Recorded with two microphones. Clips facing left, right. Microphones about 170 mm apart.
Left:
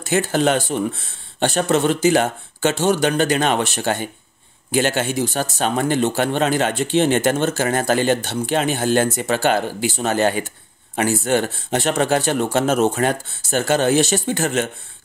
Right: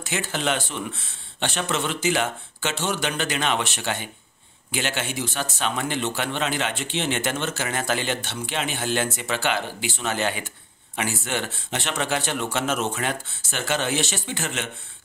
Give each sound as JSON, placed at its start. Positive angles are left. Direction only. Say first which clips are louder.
{"t": 0.0, "sound": "speech", "louder": "left 9 dB", "side_deg": 40}